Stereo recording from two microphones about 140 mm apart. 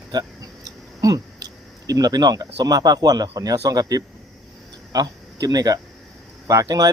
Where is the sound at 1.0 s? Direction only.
25° right (ahead or behind).